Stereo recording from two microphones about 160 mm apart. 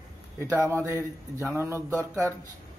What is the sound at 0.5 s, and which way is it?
Speech, 10° left (ahead or behind).